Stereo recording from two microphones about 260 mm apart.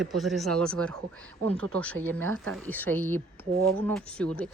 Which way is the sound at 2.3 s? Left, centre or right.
Right.